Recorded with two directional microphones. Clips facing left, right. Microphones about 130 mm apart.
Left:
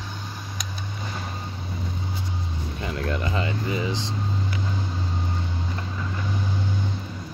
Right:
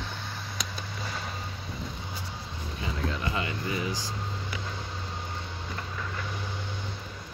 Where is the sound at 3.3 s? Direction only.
30° left (ahead or behind).